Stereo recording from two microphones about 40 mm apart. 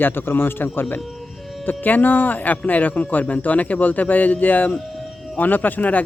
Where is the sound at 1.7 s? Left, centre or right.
Left.